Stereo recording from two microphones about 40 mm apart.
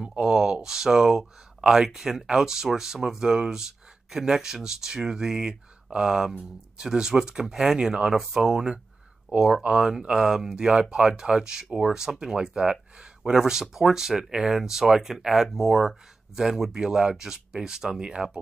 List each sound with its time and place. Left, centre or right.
0.0 s speech: right